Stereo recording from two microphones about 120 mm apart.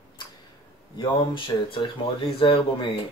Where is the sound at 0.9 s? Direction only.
40° left (ahead or behind).